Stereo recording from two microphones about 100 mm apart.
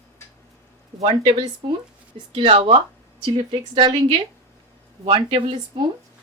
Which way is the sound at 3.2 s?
55° right (ahead or behind).